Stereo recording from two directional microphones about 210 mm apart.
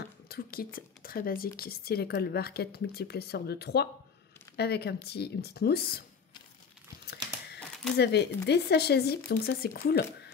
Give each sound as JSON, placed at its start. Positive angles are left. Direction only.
{"t": 0.3, "sound": "a woman's voice", "side_deg": 45}
{"t": 8.0, "sound": "a woman's voice", "side_deg": 50}